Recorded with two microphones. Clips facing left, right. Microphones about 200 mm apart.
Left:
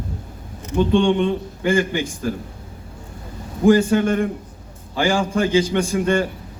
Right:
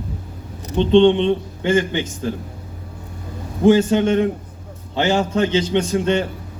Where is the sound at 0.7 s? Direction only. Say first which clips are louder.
Right 4 dB; 25° right (ahead or behind).